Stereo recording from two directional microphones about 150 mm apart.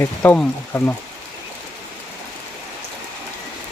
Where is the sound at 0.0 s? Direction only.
15° left (ahead or behind).